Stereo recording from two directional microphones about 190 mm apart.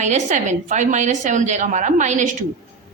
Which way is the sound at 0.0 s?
40° right (ahead or behind).